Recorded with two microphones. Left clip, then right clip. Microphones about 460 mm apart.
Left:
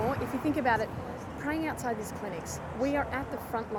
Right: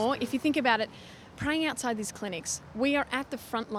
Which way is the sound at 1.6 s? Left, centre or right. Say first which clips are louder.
Right 2 dB; right.